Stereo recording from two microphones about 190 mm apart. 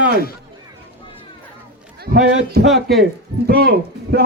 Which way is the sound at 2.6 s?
Centre (ahead or behind).